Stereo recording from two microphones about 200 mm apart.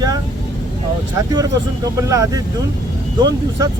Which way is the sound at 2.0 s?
15° right (ahead or behind).